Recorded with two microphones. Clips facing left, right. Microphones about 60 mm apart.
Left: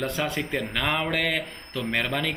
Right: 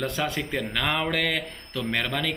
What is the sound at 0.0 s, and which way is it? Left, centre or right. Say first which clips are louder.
Speech: even; centre.